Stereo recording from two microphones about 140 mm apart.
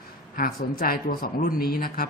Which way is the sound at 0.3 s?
90° left.